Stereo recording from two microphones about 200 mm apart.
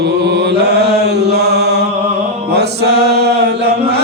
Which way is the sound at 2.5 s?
55° right (ahead or behind).